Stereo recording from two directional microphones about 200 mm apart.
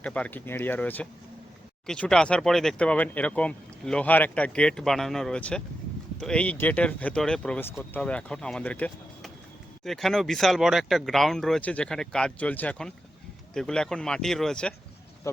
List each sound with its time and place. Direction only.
0.0 s speech: 5° left (ahead or behind)